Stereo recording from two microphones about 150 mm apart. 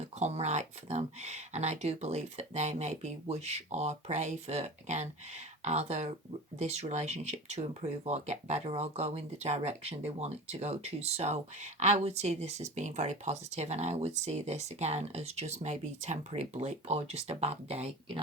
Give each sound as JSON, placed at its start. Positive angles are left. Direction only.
{"t": 0.0, "sound": "speech", "side_deg": -45}